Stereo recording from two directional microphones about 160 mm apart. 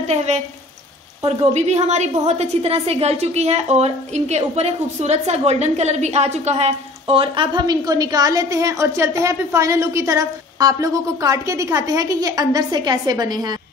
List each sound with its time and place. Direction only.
0.1 s a woman's voice: 40° right (ahead or behind); by 13.6 s 25° right (ahead or behind)